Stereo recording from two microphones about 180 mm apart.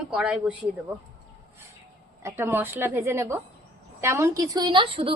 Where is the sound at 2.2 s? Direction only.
15° right (ahead or behind).